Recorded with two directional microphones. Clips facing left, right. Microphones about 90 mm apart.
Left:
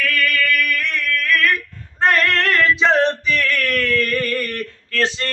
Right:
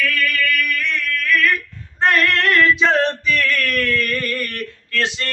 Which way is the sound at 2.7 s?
25° left (ahead or behind).